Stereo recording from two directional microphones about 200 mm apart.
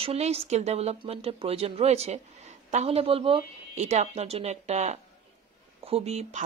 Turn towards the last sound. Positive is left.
turn(degrees=-35)  # may be behind; listen again after turning